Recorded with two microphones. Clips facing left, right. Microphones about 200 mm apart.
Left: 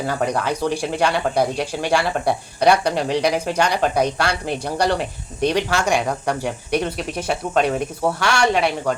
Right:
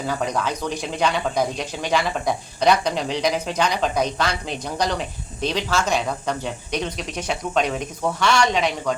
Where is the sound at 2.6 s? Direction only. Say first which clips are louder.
Left 3 dB; 10° left (ahead or behind).